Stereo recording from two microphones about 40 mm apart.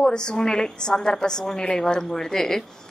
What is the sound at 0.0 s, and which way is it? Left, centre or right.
A woman's voice, centre.